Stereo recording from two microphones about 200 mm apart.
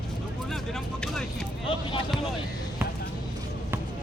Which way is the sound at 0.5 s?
Centre (ahead or behind).